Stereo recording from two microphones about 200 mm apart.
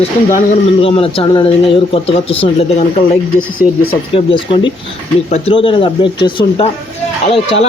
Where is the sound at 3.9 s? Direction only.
25° left (ahead or behind).